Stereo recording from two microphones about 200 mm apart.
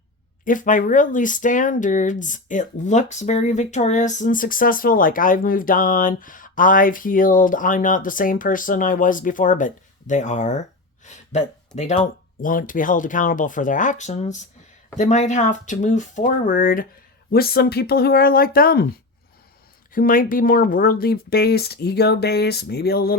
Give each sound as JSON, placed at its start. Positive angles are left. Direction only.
{"t": 0.4, "sound": "speech", "side_deg": 40}
{"t": 19.9, "sound": "speech", "side_deg": 45}